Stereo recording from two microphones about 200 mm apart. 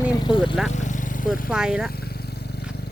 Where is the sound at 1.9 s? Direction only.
50° left (ahead or behind).